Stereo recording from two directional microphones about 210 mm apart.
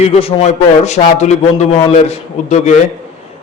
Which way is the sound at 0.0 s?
30° left (ahead or behind).